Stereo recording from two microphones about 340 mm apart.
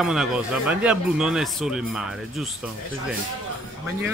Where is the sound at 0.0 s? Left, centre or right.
Centre.